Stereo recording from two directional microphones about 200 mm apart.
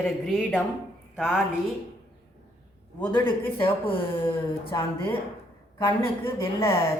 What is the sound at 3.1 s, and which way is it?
A man's voice, 25° left (ahead or behind).